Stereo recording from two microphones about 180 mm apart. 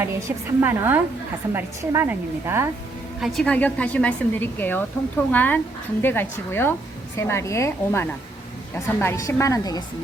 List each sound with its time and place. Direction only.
0.0 s a woman's voice: 15° right (ahead or behind)
3.2 s a woman's voice: centre (ahead or behind); by 9.8 s 20° left (ahead or behind)